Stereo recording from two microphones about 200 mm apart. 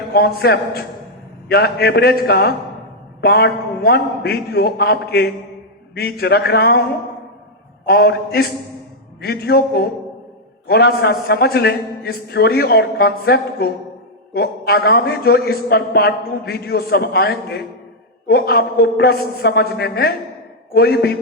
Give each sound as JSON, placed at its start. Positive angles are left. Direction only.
{"t": 0.1, "sound": "a man's voice", "side_deg": 50}
{"t": 7.9, "sound": "a man's voice", "side_deg": 50}